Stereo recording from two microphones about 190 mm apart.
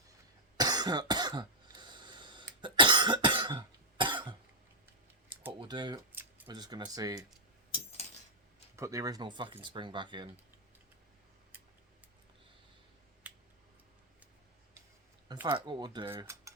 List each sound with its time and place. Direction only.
0.5 s cough: 20° right (ahead or behind)
5.5 s typing: 25° right (ahead or behind)
6.1 s a sound: 10° right (ahead or behind)
6.5 s speech: 20° right (ahead or behind)
8.7 s speech: 15° right (ahead or behind)
13.2 s a sound: 10° right (ahead or behind)
15.4 s speech: 25° right (ahead or behind)
16.0 s cutlery: 15° right (ahead or behind)